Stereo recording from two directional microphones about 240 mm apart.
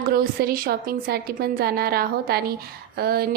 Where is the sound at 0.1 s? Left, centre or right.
Right.